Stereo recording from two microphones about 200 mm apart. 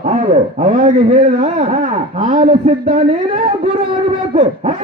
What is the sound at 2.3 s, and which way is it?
Speech, 25° right (ahead or behind).